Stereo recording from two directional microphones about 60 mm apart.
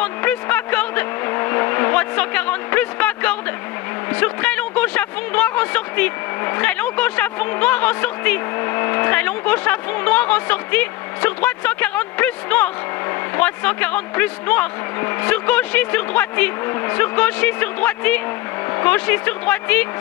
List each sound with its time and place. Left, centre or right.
0.0 s vehicle: left
4.1 s a sound: left
6.6 s speech: left
15.3 s speech: left